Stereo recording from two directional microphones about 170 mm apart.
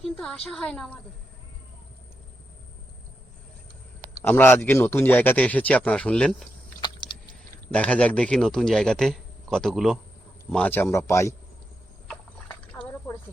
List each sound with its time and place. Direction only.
0.0 s a woman's voice: 5° left (ahead or behind)
4.2 s speech: 10° left (ahead or behind)
7.7 s a man's voice: 5° left (ahead or behind)